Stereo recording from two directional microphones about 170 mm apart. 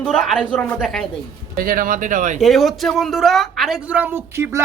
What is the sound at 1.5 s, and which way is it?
Speech, 55° right (ahead or behind).